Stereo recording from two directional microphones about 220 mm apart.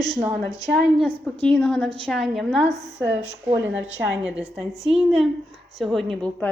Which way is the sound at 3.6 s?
55° right (ahead or behind).